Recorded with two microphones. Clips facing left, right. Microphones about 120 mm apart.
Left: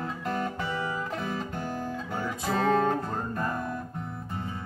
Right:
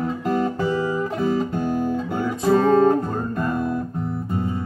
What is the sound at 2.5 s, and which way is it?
Music, 40° right (ahead or behind).